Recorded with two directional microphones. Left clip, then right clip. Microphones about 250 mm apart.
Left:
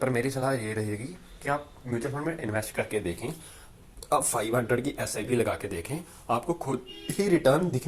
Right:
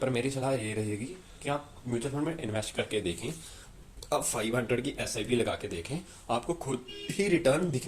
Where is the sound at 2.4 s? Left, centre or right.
Centre.